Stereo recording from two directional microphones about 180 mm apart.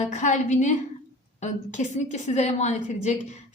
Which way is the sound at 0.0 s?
40° left (ahead or behind).